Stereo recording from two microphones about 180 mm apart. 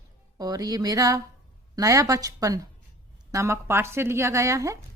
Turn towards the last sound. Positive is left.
turn(degrees=-20)  # may be behind; listen again after turning